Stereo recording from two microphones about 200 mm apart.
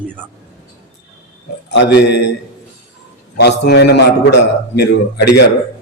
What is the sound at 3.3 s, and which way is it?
A man's voice, 55° left (ahead or behind).